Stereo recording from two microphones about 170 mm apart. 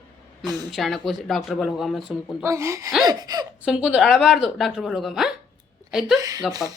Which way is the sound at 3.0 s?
25° right (ahead or behind).